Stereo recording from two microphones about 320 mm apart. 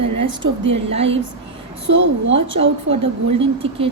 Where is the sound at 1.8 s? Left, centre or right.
Right.